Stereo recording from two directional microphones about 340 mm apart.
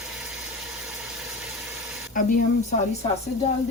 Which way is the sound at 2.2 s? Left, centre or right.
Left.